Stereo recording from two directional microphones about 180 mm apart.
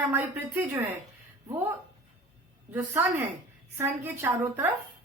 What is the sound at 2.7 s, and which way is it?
Speech, 15° right (ahead or behind).